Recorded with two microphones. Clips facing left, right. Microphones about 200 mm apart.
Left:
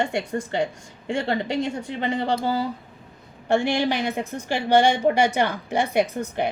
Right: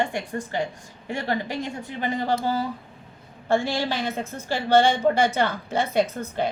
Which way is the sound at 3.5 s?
20° left (ahead or behind).